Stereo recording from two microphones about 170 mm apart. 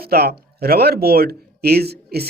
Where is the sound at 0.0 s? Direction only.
65° right (ahead or behind).